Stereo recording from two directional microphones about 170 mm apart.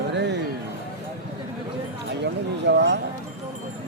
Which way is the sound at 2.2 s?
90° right.